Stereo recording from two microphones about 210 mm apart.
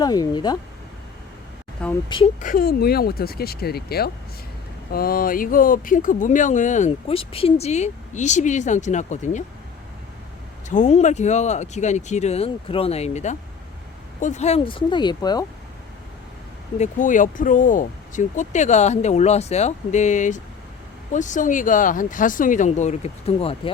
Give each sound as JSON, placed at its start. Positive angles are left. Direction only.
{"t": 0.0, "sound": "speech", "side_deg": 20}
{"t": 2.0, "sound": "speech", "side_deg": 25}
{"t": 2.4, "sound": "speech", "side_deg": 40}
{"t": 10.7, "sound": "speech", "side_deg": 35}
{"t": 16.7, "sound": "speech", "side_deg": 35}